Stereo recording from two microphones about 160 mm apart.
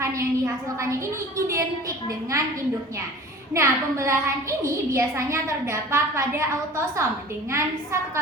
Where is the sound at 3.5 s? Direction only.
20° right (ahead or behind).